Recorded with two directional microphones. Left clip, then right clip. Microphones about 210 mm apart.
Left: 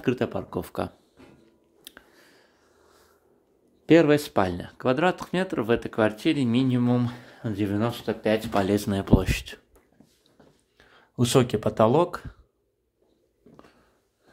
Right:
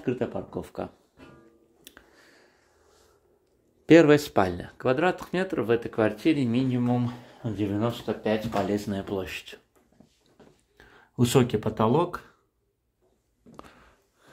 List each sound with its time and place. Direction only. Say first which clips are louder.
0.0 s speech: left 3 dB; 30° left (ahead or behind)
1.9 s a sound: left 3 dB; 10° left (ahead or behind)
3.8 s speech: right 1 dB; centre (ahead or behind); by 9.6 s 30° left (ahead or behind)
10.8 s speech: right 1 dB; 5° left (ahead or behind); by 12.3 s 25° left (ahead or behind)